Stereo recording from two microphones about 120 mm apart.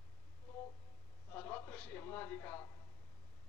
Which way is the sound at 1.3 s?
15° left (ahead or behind).